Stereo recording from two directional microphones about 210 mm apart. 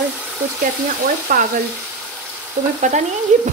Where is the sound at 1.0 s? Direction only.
40° right (ahead or behind).